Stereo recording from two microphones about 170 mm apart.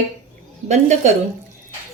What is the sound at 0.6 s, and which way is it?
Speech, 45° right (ahead or behind).